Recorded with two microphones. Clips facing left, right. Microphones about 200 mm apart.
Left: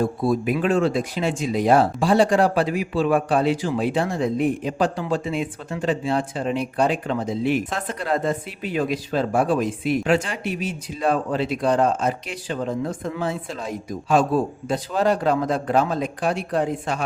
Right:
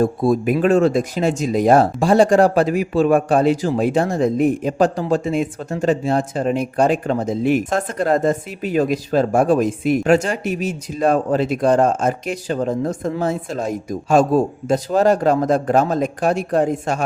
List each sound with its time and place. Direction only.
0.0 s speech: 45° right (ahead or behind)